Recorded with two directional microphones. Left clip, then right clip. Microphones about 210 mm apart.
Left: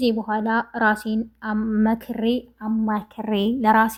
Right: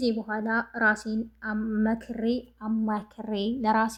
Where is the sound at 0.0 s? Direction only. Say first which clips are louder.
Left 6 dB; 25° left (ahead or behind).